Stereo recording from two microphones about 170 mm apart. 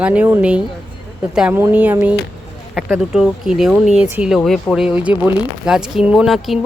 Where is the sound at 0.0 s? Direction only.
10° right (ahead or behind).